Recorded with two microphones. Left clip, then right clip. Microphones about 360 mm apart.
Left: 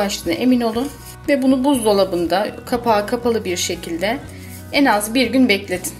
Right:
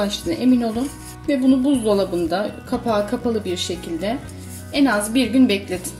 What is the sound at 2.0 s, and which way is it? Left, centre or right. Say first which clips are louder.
Speech: left 4 dB; left.